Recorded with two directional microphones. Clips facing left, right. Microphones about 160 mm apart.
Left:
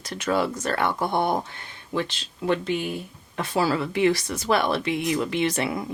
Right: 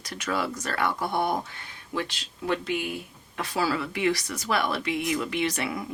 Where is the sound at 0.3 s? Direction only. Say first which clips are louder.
Left 4 dB; 25° left (ahead or behind).